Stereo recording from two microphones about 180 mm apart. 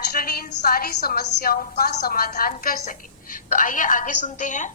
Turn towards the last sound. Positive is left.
turn(degrees=45)  # may be behind; listen again after turning